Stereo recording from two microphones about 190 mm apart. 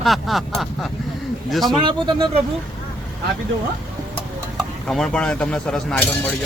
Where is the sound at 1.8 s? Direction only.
25° right (ahead or behind).